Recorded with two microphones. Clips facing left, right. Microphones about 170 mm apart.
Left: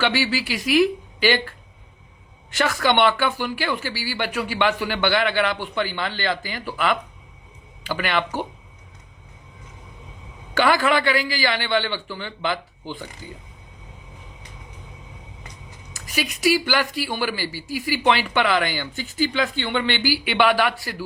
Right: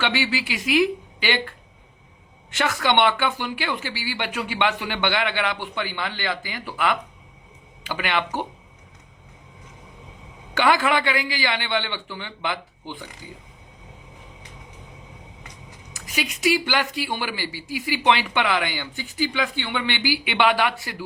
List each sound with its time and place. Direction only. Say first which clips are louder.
0.0 s speech: left 2 dB; 20° right (ahead or behind)
2.5 s speech: left 2 dB; 20° right (ahead or behind)
10.5 s speech: left 1 dB; 20° right (ahead or behind)
15.9 s speech: left 2 dB; 20° right (ahead or behind)